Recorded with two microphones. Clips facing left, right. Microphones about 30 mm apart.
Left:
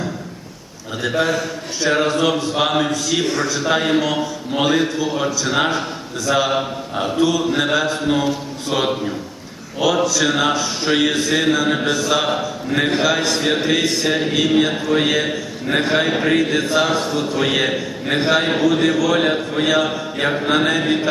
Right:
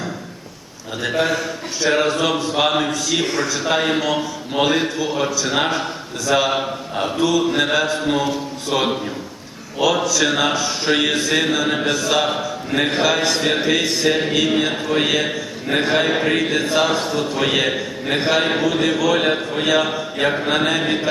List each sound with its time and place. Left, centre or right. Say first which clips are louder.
1.0 s a man's voice: left 1 dB; centre